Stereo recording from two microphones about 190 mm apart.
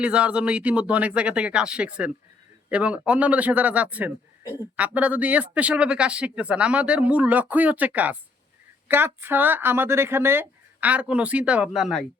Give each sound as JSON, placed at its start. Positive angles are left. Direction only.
{"t": 0.0, "sound": "a man's voice", "side_deg": -5}